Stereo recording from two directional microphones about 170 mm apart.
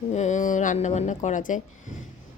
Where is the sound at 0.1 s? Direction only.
45° left (ahead or behind).